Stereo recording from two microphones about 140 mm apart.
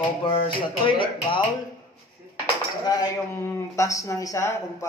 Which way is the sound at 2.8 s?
30° left (ahead or behind).